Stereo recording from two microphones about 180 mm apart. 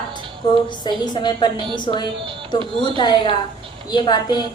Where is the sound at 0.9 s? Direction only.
25° left (ahead or behind).